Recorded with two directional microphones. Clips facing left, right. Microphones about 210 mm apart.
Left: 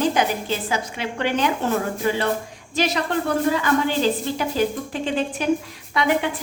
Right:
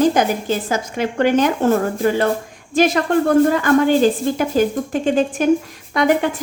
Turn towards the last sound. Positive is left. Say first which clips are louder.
# right 5 dB
turn(degrees=-45)  # may be behind; listen again after turning